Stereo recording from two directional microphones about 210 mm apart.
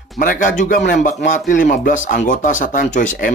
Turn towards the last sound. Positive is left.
turn(degrees=40)  # may be behind; listen again after turning